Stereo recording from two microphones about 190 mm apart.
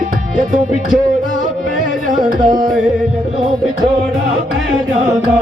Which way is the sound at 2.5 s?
20° right (ahead or behind).